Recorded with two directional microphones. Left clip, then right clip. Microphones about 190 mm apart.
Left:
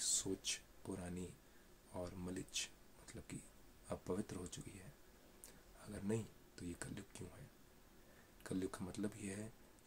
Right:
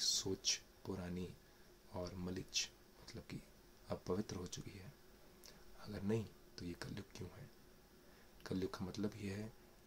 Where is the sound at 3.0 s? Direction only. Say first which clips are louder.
Right 1 dB; 5° right (ahead or behind).